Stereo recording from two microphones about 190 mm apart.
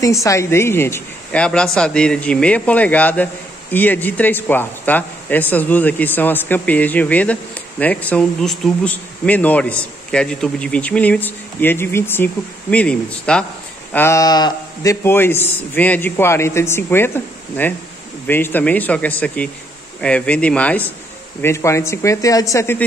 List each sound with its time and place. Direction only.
0.0 s speech: 15° left (ahead or behind)